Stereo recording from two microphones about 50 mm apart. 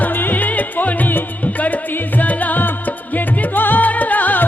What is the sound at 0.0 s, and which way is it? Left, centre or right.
Music, left.